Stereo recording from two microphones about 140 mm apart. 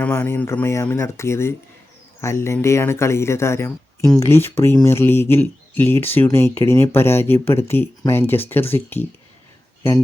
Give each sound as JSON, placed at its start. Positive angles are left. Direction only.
{"t": 0.0, "sound": "speech", "side_deg": 10}